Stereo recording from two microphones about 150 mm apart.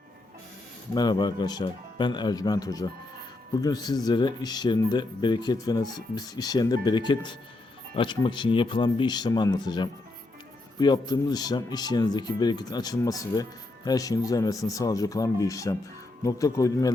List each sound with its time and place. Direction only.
0.9 s speech: 30° left (ahead or behind)